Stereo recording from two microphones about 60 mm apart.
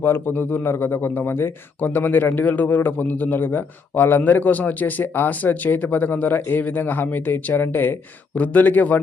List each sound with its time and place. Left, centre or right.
0.0 s speech: left